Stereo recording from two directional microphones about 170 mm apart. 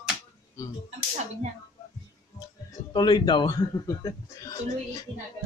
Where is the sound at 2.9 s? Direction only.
25° left (ahead or behind).